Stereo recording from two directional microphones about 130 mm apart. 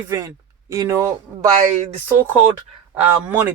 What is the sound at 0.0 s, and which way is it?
Speech, 20° right (ahead or behind).